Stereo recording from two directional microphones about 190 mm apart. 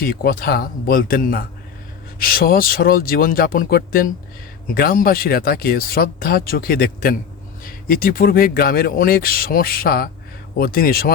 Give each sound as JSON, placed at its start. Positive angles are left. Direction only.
{"t": 0.0, "sound": "speech", "side_deg": 50}